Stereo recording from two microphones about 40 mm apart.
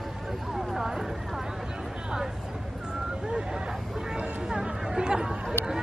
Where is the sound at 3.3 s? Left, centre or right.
Right.